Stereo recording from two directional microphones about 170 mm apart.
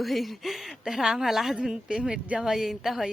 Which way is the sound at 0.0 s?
Centre (ahead or behind).